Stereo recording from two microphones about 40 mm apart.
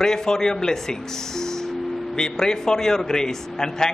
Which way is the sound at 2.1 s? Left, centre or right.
Centre.